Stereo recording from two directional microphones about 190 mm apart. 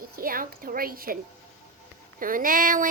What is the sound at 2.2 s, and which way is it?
Speech, 45° right (ahead or behind).